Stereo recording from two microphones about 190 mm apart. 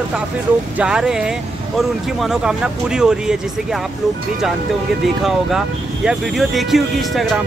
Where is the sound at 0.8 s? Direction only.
5° right (ahead or behind).